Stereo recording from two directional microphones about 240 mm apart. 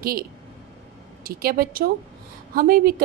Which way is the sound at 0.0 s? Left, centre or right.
Right.